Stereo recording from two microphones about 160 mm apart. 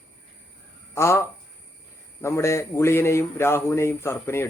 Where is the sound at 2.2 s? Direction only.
15° left (ahead or behind).